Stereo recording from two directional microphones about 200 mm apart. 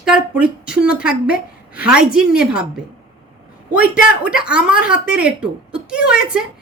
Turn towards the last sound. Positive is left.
turn(degrees=-5)  # may be behind; listen again after turning